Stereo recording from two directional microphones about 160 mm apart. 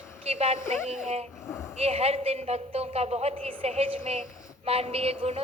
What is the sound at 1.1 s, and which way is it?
Speech, 40° right (ahead or behind).